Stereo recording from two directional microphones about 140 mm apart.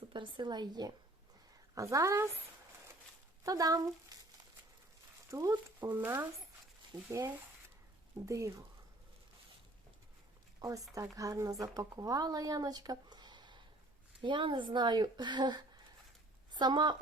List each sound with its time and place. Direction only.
0.1 s a woman's voice: 35° right (ahead or behind)
3.4 s speech: 25° right (ahead or behind)
5.3 s a woman's voice: 25° right (ahead or behind)
8.3 s a woman's voice: 20° right (ahead or behind)
10.6 s a woman's voice: 25° right (ahead or behind)